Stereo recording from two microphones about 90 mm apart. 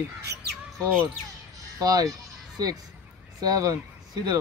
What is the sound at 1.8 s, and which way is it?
Speech, 40° right (ahead or behind).